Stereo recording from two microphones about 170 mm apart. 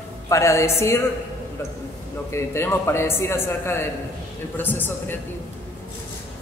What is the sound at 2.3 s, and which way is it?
A woman's voice, 15° left (ahead or behind).